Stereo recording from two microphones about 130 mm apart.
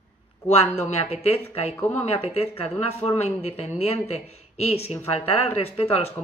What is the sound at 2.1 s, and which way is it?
Speech, 50° left (ahead or behind).